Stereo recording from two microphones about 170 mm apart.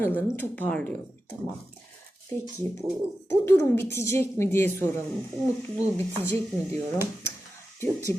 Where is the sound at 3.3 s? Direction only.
15° left (ahead or behind).